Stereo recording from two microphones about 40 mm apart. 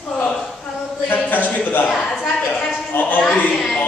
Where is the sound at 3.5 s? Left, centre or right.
Centre.